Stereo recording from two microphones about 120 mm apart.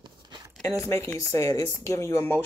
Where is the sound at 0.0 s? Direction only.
35° right (ahead or behind).